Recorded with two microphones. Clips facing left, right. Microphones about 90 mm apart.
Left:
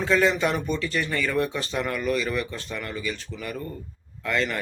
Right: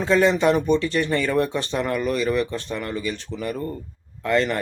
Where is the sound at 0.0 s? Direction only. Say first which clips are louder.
Right 4 dB; 25° right (ahead or behind).